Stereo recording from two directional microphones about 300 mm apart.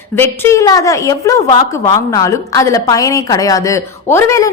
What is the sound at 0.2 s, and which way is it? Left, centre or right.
A woman's voice, centre.